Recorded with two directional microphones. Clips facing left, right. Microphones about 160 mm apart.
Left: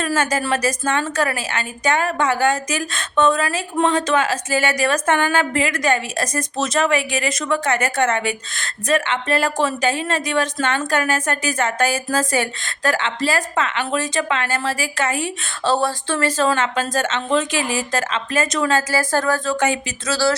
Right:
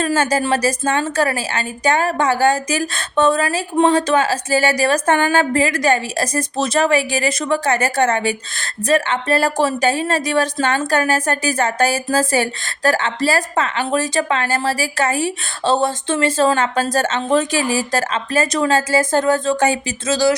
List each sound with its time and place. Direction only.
0.0 s a woman's voice: 30° right (ahead or behind)
19.5 s a woman's voice: 35° right (ahead or behind)